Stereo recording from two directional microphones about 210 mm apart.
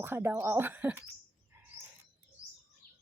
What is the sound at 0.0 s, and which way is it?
Speech, 10° right (ahead or behind).